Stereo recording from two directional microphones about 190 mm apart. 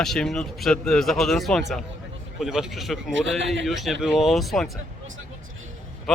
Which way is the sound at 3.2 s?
70° right (ahead or behind).